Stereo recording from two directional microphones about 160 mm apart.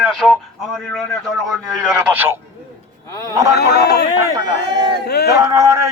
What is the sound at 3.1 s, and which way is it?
Speech, 20° left (ahead or behind).